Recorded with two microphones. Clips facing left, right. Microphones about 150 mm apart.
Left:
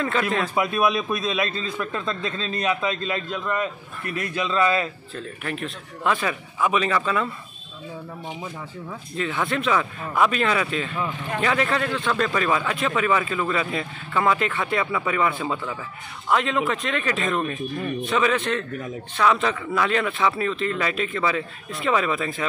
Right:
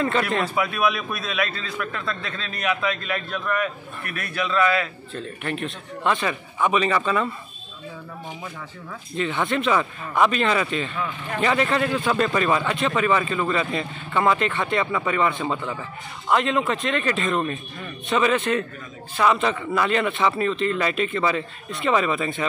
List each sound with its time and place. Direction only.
0.6 s a man's voice: 25° left (ahead or behind)
5.1 s speech: centre (ahead or behind)
9.1 s speech: centre (ahead or behind)